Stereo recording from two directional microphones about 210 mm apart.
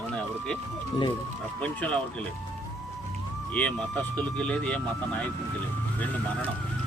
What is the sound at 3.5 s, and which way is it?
Speech, 5° left (ahead or behind).